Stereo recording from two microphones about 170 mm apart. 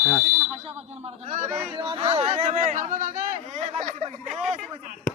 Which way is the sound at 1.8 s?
30° right (ahead or behind).